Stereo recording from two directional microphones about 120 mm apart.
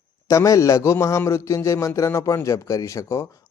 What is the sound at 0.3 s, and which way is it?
A man's voice, 25° left (ahead or behind).